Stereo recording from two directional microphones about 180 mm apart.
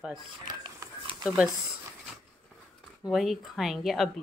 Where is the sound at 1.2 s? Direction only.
5° right (ahead or behind).